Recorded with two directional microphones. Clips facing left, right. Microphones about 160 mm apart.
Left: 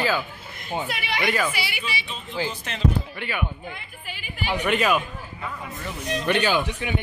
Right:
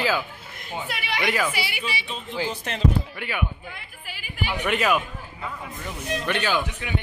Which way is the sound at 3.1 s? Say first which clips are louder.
Left 1 dB; 10° right (ahead or behind).